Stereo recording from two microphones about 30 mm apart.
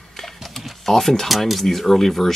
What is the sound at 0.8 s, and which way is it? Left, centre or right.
Speech, centre.